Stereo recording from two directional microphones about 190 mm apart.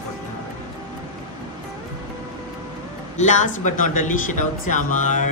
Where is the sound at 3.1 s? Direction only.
40° left (ahead or behind).